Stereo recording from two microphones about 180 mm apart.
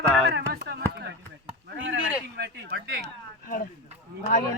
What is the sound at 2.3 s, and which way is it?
Speech, 60° right (ahead or behind).